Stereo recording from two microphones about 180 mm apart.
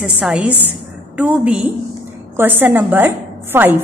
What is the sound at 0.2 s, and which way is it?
A woman's voice, 5° right (ahead or behind).